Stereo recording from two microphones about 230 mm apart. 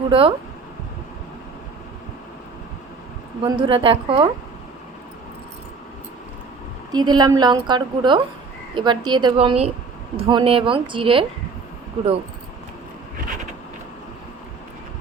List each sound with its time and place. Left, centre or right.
0.1 s a woman's voice: right
3.4 s a woman's voice: right
6.9 s a woman's voice: centre